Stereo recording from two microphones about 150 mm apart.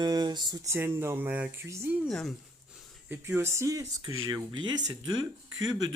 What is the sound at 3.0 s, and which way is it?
Speech, 10° right (ahead or behind).